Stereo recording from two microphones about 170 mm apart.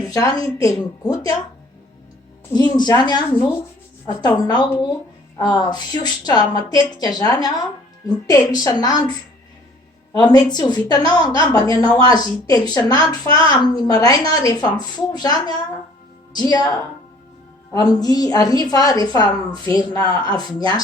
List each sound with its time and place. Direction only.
0.0 s a woman's voice: 20° left (ahead or behind)
2.5 s a woman's voice: 25° left (ahead or behind)
4.4 s a woman's voice: 25° left (ahead or behind)